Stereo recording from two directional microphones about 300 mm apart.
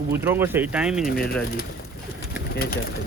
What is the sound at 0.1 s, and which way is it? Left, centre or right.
Speech, centre.